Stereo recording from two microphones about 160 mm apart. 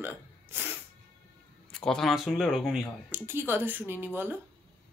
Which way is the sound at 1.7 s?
5° left (ahead or behind).